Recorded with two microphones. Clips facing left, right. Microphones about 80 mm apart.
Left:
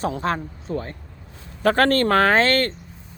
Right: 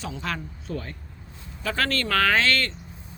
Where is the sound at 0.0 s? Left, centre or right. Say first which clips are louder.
Left 8 dB; left.